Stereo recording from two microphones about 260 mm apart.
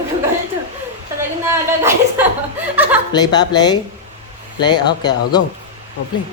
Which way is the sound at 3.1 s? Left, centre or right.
Centre.